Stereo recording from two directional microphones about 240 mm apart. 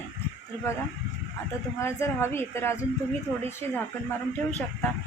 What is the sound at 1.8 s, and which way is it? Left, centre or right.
Speech, centre.